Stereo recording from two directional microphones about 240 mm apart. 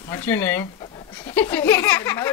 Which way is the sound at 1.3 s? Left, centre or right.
Centre.